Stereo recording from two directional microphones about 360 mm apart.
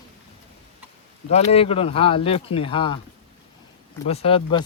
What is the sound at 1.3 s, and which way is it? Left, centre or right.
Speech, centre.